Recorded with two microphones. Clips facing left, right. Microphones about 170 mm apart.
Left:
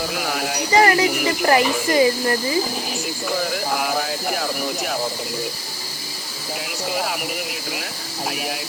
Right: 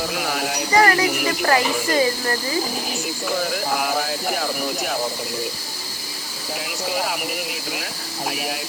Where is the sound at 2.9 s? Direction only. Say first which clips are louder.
Even; centre (ahead or behind).